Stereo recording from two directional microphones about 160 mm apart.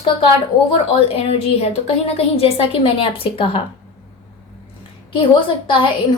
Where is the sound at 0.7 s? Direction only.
40° left (ahead or behind).